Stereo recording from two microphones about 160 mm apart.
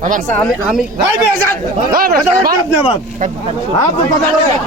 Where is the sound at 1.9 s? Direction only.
65° right (ahead or behind).